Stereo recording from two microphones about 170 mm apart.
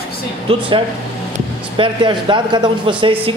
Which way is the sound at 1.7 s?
30° right (ahead or behind).